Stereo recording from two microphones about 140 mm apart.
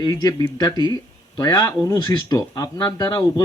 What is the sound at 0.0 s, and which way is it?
Speech, 25° left (ahead or behind).